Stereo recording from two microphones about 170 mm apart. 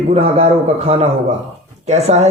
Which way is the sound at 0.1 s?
35° right (ahead or behind).